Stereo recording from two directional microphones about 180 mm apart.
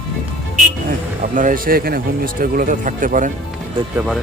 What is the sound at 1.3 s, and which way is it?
Speech, 50° right (ahead or behind).